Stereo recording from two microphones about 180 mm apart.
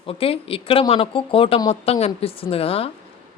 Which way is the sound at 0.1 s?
30° left (ahead or behind).